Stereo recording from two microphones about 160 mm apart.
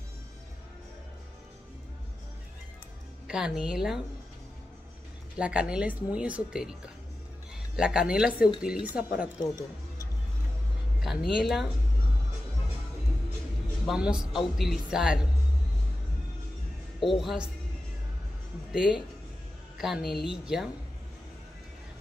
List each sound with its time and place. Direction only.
3.3 s a woman's voice: 5° right (ahead or behind)
5.4 s a woman's voice: 5° right (ahead or behind)
9.4 s speech: 20° left (ahead or behind)
11.3 s a woman's voice: centre (ahead or behind)
13.8 s a woman's voice: 5° right (ahead or behind)
17.2 s a woman's voice: centre (ahead or behind)
18.7 s a woman's voice: 5° right (ahead or behind)